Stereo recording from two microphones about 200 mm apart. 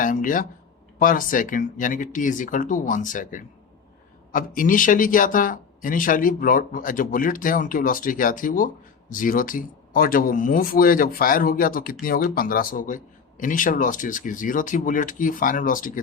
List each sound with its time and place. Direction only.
0.0 s speech: 40° left (ahead or behind)